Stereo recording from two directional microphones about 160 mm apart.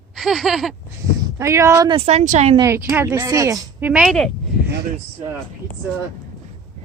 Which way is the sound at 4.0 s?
5° left (ahead or behind).